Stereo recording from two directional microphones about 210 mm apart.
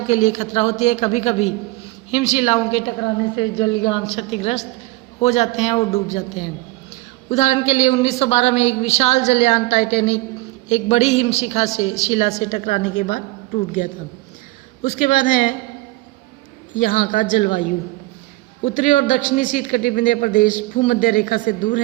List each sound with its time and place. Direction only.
0.1 s a man's voice: 35° left (ahead or behind)
16.7 s a man's voice: 40° left (ahead or behind)
18.6 s a man's voice: 35° left (ahead or behind)